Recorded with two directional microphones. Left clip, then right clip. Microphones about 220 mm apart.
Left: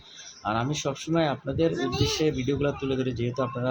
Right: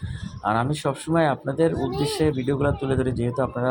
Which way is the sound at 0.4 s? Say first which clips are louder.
Right 5 dB; 15° right (ahead or behind).